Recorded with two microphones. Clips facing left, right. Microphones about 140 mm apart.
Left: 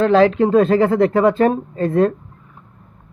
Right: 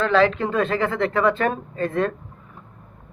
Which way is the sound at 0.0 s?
40° left (ahead or behind).